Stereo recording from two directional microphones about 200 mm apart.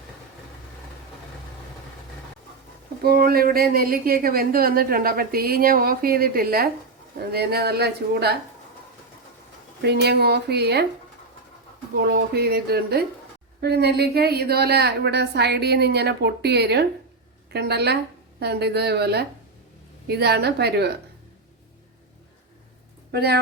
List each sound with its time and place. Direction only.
3.0 s speech: 50° right (ahead or behind)
9.8 s a woman's voice: 55° right (ahead or behind)
12.0 s a woman's voice: 50° right (ahead or behind)
23.1 s speech: 55° right (ahead or behind)